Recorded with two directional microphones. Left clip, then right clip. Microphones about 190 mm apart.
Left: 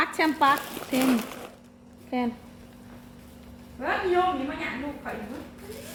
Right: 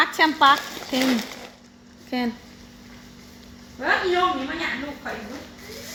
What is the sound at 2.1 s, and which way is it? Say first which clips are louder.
Speech: right 2 dB; 65° right (ahead or behind).